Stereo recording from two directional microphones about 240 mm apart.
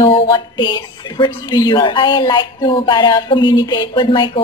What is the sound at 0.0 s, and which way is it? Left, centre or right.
Speech, centre.